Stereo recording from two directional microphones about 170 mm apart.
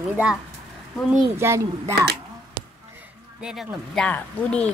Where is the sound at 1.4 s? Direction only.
15° right (ahead or behind).